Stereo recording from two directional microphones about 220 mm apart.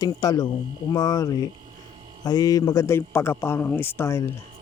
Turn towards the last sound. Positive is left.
turn(degrees=10)  # may be behind; listen again after turning